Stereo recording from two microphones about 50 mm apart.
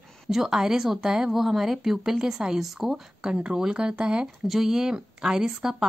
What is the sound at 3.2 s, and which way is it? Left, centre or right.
A woman's voice, centre.